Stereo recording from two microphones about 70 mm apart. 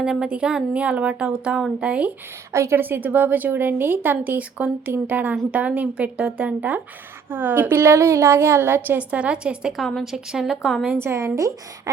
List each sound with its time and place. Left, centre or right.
0.0 s speech: centre
2.5 s a woman's voice: right; by 9.7 s centre
9.7 s a woman's voice: centre
11.0 s a woman's voice: right